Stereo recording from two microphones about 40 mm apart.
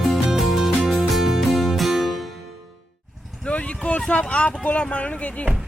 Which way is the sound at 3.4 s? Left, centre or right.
Left.